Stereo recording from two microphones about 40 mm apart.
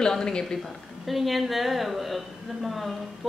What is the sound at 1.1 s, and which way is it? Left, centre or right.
A woman's voice, centre.